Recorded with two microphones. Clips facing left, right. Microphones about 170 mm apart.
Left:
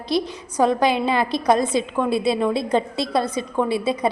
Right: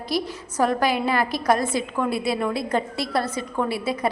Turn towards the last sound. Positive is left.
turn(degrees=20)  # may be behind; listen again after turning